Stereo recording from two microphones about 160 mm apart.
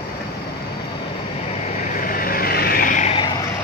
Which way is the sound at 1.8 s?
60° left (ahead or behind).